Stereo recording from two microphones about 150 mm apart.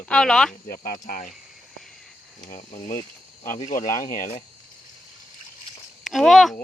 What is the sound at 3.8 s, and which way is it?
Speech, 20° left (ahead or behind).